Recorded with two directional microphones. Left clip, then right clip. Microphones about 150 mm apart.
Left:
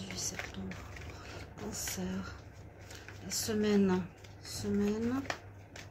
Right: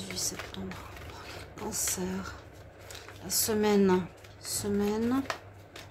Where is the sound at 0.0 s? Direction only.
25° right (ahead or behind).